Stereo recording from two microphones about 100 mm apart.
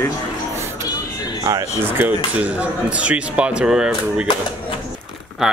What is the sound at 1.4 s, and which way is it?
Speech, 40° right (ahead or behind).